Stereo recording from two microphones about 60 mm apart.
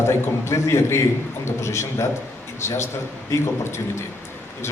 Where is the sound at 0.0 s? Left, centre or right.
Left.